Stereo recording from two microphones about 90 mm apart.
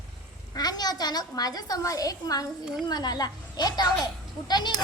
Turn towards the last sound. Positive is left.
turn(degrees=50)  # may be behind; listen again after turning